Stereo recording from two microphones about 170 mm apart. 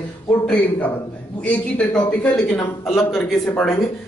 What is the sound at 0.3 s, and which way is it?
A man's voice, 10° left (ahead or behind).